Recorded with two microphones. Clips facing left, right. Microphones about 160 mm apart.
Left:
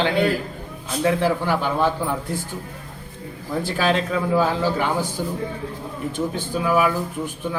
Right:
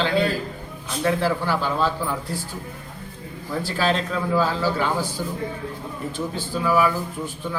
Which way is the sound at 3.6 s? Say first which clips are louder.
Left 2 dB; 15° left (ahead or behind).